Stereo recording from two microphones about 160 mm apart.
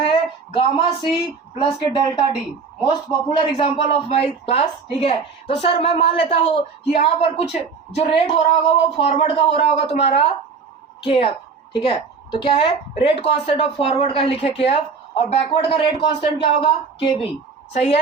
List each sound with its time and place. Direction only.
0.1 s speech: 30° left (ahead or behind)
3.3 s a woman's voice: 35° left (ahead or behind)